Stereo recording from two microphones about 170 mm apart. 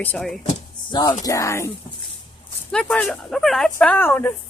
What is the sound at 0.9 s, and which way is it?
Speech, 25° left (ahead or behind).